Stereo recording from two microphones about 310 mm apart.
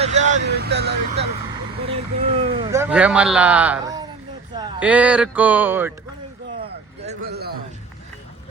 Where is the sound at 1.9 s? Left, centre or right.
Centre.